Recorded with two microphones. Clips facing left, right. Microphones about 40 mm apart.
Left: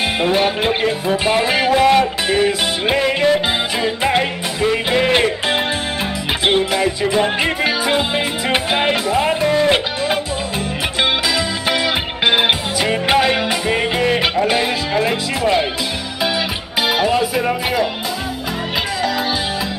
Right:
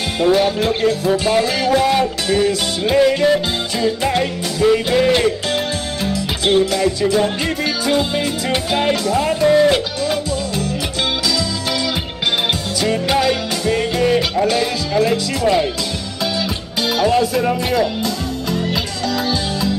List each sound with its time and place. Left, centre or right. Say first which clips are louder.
0.2 s music: right 4 dB; left
11.3 s music: left 2 dB; left
16.8 s speech: right 1 dB; centre